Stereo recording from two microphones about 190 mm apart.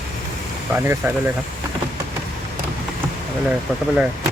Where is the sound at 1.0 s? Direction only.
10° right (ahead or behind).